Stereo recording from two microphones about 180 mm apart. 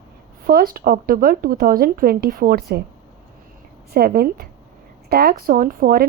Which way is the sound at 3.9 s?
55° right (ahead or behind).